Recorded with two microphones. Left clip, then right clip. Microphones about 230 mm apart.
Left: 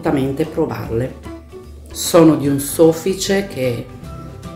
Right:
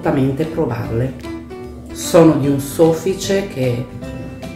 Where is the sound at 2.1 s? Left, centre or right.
Left.